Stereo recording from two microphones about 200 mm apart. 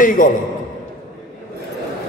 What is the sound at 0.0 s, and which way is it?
Speech, 40° left (ahead or behind).